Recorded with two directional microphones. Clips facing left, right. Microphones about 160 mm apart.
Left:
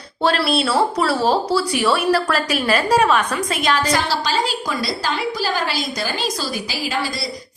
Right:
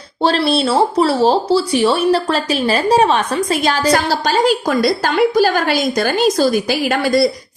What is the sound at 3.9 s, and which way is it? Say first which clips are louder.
A woman's voice: right 5 dB; 45° right (ahead or behind).